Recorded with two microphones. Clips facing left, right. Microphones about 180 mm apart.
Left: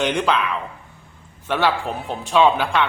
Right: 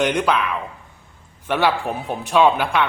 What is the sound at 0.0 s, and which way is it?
Speech, 10° right (ahead or behind).